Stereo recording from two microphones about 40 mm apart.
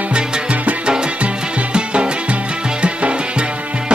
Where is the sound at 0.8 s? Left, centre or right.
Right.